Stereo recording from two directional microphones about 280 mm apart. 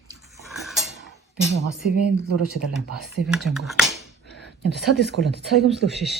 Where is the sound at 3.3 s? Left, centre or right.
Centre.